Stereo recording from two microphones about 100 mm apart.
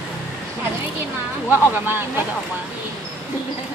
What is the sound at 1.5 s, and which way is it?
Speech, 20° right (ahead or behind).